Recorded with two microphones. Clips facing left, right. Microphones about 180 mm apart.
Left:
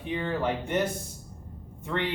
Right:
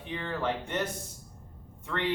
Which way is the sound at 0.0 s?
10° left (ahead or behind).